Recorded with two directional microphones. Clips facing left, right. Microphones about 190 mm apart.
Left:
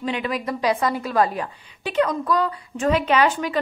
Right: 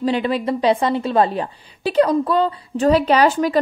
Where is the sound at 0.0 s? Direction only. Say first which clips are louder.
Right 6 dB; 30° right (ahead or behind).